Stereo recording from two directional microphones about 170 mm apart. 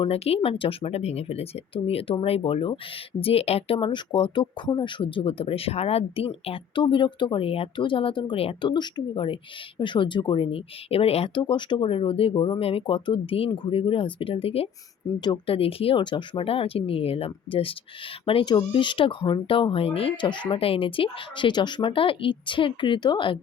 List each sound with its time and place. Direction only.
0.0 s speech: 35° left (ahead or behind)